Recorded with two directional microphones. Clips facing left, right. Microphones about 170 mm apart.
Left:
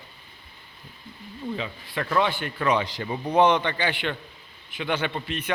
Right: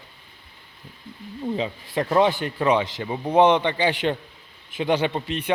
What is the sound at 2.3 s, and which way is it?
Speech, 40° right (ahead or behind).